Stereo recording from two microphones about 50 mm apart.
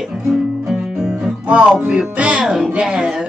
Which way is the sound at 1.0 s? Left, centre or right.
Centre.